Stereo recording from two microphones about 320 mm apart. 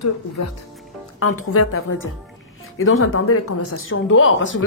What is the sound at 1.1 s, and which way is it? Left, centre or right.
Speech, left.